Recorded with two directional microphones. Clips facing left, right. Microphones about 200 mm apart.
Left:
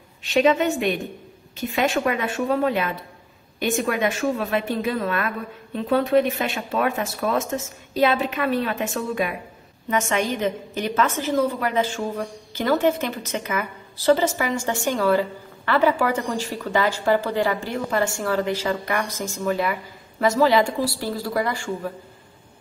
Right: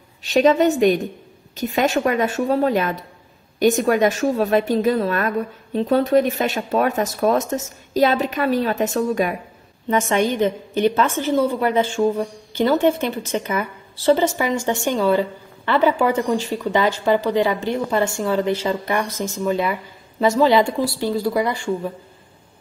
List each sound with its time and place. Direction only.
0.2 s a woman's voice: 40° right (ahead or behind); by 21.5 s 15° right (ahead or behind)